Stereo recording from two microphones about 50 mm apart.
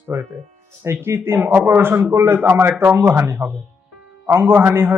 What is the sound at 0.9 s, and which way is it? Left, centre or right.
A man's voice, right.